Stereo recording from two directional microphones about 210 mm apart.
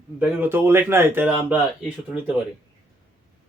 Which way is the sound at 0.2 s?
10° right (ahead or behind).